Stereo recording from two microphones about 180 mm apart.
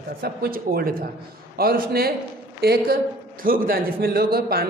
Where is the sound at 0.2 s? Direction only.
55° right (ahead or behind).